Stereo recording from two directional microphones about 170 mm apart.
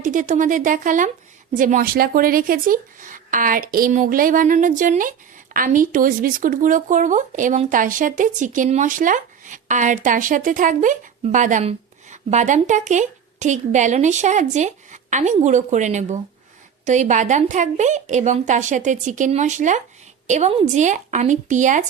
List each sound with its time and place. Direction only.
0.0 s speech: 50° right (ahead or behind)